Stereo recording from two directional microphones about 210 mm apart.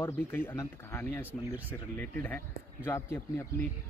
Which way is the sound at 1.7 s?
10° left (ahead or behind).